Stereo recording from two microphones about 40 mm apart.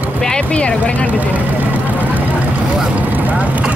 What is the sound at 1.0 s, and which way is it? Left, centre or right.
Speech, right.